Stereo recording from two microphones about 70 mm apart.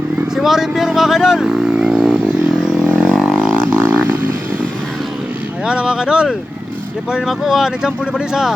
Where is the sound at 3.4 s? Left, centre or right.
Right.